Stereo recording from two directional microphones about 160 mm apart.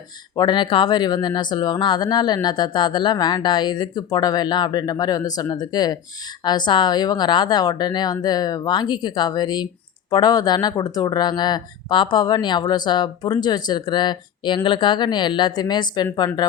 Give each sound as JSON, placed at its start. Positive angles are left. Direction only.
{"t": 0.3, "sound": "speech", "side_deg": 30}